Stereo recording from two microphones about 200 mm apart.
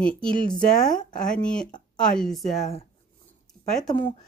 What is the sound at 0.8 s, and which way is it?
Speech, 20° left (ahead or behind).